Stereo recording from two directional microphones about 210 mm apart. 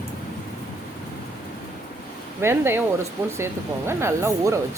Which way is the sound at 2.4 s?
10° right (ahead or behind).